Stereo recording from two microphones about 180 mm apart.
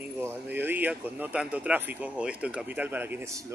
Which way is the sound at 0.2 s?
10° right (ahead or behind).